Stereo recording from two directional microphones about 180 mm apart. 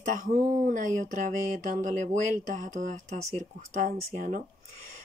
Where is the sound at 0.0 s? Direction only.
40° right (ahead or behind).